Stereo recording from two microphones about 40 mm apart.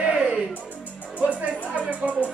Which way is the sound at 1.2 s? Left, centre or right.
Right.